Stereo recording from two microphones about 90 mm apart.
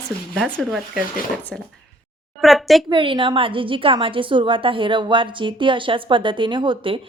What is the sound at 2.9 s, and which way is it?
A woman's voice, 70° right (ahead or behind).